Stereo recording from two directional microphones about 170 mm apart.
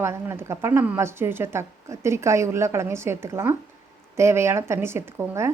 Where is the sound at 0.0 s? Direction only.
15° right (ahead or behind).